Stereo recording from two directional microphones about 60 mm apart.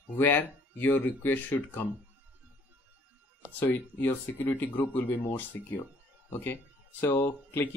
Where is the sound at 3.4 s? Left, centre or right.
Left.